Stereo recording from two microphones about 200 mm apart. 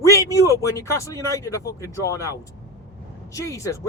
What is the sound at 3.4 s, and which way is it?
Speech, 15° left (ahead or behind).